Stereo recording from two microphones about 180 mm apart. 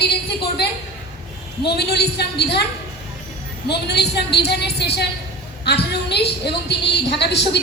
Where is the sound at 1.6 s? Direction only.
65° left (ahead or behind).